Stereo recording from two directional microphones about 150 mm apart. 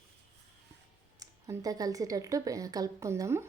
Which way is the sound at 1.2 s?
25° right (ahead or behind).